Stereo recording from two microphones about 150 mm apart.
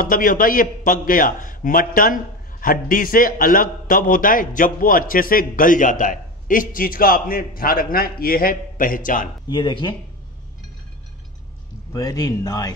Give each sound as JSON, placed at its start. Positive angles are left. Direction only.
{"t": 0.0, "sound": "a man's voice", "side_deg": 65}
{"t": 9.5, "sound": "speech", "side_deg": 30}
{"t": 11.9, "sound": "speech", "side_deg": 25}